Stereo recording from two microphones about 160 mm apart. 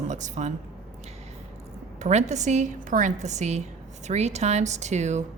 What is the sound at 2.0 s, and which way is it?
A woman's voice, 45° right (ahead or behind).